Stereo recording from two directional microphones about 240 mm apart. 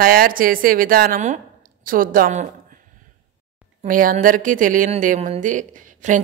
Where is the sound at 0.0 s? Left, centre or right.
Right.